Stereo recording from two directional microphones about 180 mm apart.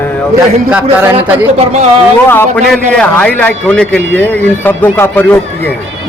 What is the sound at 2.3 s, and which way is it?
Speech, 10° left (ahead or behind).